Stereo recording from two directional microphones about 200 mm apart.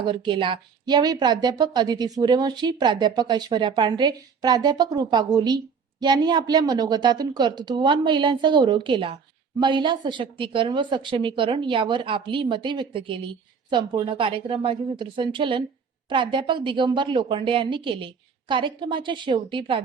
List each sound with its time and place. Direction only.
0.1 s a woman's voice: 25° right (ahead or behind)